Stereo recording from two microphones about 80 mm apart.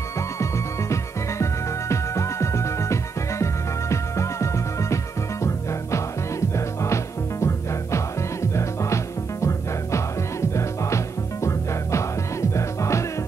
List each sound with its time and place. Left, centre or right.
1.4 s music: left